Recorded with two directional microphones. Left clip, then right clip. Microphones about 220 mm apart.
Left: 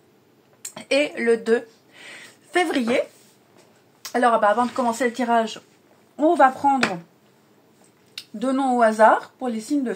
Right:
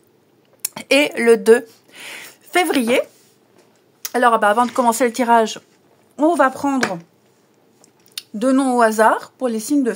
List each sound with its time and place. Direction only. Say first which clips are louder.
0.6 s a sound: right 5 dB; 55° right (ahead or behind)
4.0 s a woman's voice: right 4 dB; 45° right (ahead or behind)
8.1 s speech: right 7 dB; 55° right (ahead or behind)